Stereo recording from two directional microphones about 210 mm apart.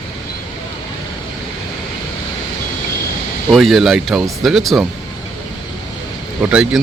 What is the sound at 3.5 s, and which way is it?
Speech, centre (ahead or behind).